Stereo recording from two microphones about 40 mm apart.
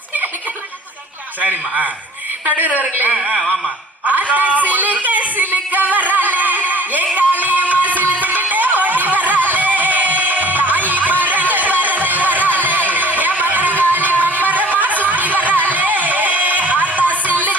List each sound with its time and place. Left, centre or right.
1.4 s a man's voice: right
2.5 s a woman's voice: right
4.0 s a sound: right
7.2 s music: right